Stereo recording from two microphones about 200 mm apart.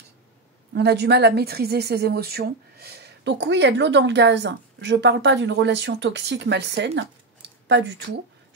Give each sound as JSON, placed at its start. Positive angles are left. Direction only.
{"t": 0.7, "sound": "a woman's voice", "side_deg": -55}